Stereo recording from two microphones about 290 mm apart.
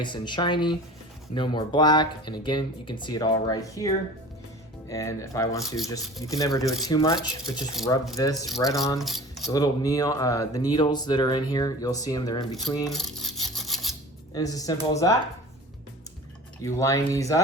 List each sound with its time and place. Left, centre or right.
0.0 s speech: centre
7.8 s speech: centre
8.1 s speech: centre
12.9 s filing: centre
14.3 s speech: centre
16.6 s speech: centre